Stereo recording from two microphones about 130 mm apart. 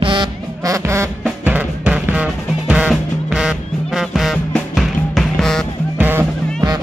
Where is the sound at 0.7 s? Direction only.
20° right (ahead or behind); by 5.7 s 5° left (ahead or behind).